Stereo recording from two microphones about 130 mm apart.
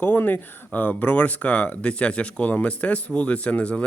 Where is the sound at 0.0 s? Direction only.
15° left (ahead or behind).